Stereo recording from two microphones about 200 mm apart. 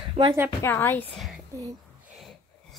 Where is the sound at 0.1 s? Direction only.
25° right (ahead or behind).